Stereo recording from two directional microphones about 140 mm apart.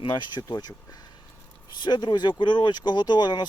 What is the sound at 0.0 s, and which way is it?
Speech, 35° left (ahead or behind).